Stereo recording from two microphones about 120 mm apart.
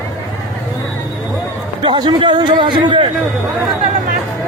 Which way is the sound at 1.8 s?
40° right (ahead or behind).